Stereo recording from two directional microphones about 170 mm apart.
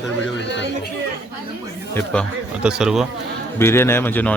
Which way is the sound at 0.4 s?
90° left.